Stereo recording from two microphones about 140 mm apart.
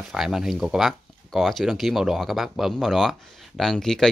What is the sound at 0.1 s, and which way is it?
Speech, 5° right (ahead or behind).